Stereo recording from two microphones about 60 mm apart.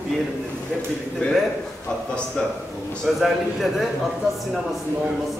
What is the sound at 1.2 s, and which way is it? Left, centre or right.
A man's voice, left.